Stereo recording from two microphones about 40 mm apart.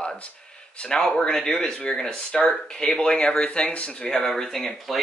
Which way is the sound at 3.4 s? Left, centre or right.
Left.